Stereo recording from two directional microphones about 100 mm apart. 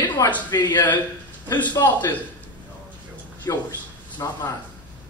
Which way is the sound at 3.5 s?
35° left (ahead or behind).